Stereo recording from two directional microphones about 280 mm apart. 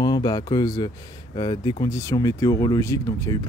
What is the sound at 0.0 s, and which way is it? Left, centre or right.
Speech, centre.